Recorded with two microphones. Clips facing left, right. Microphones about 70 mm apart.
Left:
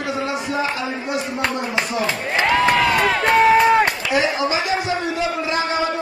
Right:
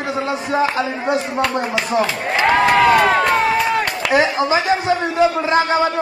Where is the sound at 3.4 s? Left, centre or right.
Left.